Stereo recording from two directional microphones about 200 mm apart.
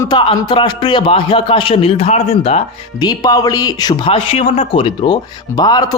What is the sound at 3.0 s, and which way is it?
A man's voice, 20° left (ahead or behind).